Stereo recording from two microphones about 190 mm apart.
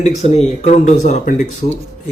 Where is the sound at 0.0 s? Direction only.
35° left (ahead or behind).